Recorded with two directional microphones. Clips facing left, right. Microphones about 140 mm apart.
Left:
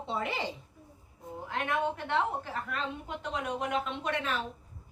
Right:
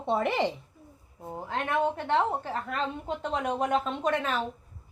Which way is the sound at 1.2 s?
40° right (ahead or behind).